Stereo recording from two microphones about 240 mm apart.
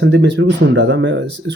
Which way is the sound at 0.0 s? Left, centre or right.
Right.